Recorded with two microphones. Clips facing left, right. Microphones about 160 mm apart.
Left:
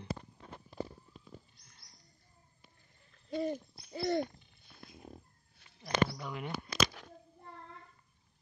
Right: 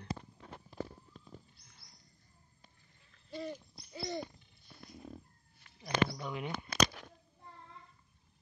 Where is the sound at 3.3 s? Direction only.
50° left (ahead or behind).